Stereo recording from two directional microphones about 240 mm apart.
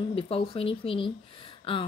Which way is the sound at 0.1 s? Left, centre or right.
Left.